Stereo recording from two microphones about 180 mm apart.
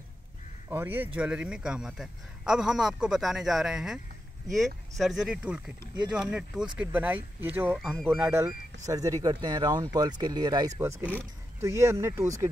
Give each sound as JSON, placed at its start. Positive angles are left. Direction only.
{"t": 0.7, "sound": "a man's voice", "side_deg": -10}
{"t": 10.8, "sound": "speech", "side_deg": -10}